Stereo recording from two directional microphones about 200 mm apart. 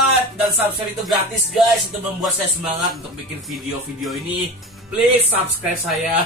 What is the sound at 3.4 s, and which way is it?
Speech, centre (ahead or behind).